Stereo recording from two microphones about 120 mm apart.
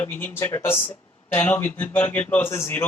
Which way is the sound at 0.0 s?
15° left (ahead or behind).